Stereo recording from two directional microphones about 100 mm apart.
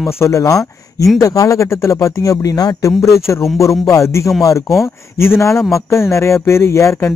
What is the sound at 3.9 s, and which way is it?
Speech, 30° left (ahead or behind).